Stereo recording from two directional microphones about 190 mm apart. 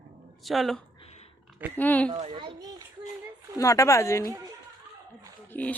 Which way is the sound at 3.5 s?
15° left (ahead or behind).